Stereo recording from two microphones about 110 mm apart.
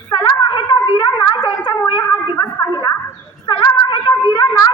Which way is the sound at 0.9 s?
40° left (ahead or behind).